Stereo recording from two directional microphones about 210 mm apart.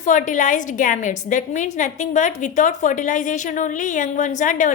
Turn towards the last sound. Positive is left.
turn(degrees=40)  # may be behind; listen again after turning